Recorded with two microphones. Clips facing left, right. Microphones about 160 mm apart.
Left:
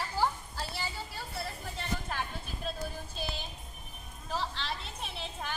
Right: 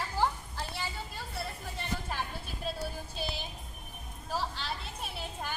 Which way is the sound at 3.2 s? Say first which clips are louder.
Right 1 dB; 10° right (ahead or behind).